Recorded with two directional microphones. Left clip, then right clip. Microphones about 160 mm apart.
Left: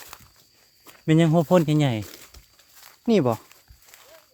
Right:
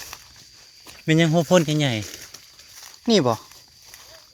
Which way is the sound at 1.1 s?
20° left (ahead or behind).